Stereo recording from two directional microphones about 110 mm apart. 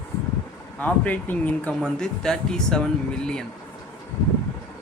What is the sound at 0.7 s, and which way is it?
Speech, 15° left (ahead or behind).